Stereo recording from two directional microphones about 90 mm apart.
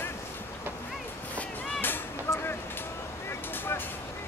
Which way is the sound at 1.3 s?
20° left (ahead or behind).